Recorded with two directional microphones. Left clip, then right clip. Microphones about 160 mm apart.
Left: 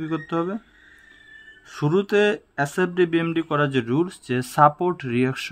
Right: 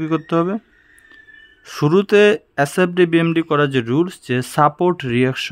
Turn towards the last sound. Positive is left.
turn(degrees=-45)  # may be behind; listen again after turning